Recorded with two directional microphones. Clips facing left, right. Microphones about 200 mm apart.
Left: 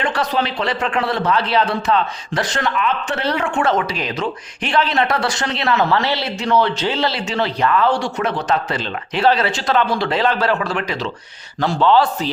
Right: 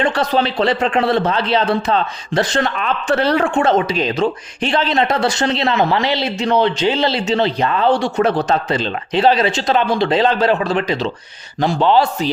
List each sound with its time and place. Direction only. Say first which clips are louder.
0.0 s a man's voice: right 4 dB; 30° right (ahead or behind)